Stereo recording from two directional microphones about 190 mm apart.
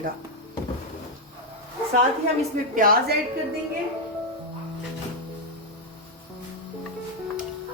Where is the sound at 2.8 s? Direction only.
50° right (ahead or behind).